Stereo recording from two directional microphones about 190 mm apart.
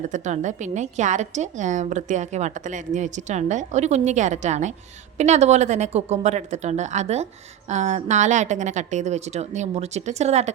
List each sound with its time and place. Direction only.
0.1 s a woman's voice: 40° right (ahead or behind)